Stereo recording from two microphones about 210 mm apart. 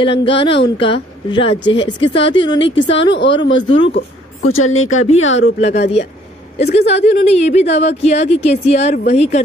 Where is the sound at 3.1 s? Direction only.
55° left (ahead or behind).